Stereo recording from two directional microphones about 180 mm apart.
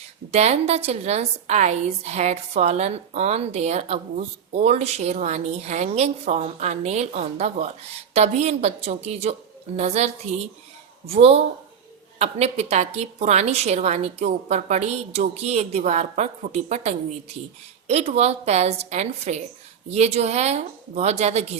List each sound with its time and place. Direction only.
0.3 s a woman's voice: 35° right (ahead or behind)